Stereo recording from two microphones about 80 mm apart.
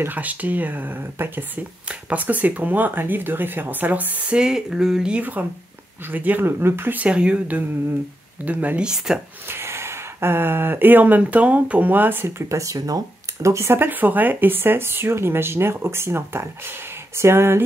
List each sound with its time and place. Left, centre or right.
0.0 s speech: right
4.4 s speech: centre
5.2 s speech: right
7.1 s speech: centre
8.8 s speech: centre
9.5 s speech: right
12.4 s speech: right
13.7 s speech: right